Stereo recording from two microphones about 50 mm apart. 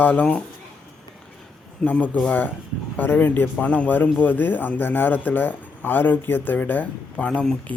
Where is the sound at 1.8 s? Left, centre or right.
Centre.